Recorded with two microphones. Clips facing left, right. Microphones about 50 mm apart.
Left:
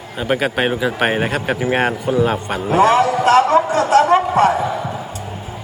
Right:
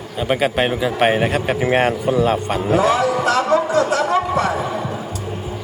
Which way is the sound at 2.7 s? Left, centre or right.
Left.